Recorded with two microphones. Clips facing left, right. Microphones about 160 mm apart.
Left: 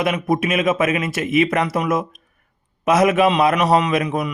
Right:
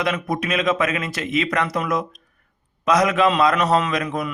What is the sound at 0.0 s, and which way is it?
A man's voice, 20° left (ahead or behind).